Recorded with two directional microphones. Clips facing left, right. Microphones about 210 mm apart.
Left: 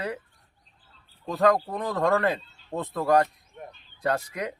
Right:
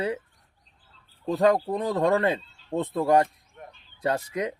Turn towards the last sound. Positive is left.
turn(degrees=-25)  # may be behind; listen again after turning